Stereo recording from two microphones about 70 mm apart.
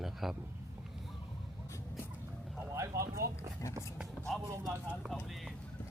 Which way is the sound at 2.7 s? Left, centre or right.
Right.